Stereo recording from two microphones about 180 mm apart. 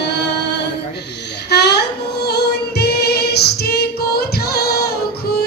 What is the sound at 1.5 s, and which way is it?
Music, 65° left (ahead or behind).